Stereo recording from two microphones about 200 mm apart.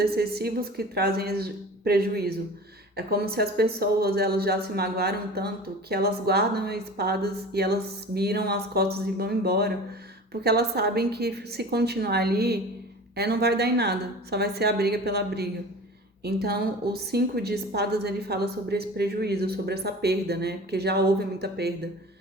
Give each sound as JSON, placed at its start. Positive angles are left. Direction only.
{"t": 0.0, "sound": "a woman's voice", "side_deg": -55}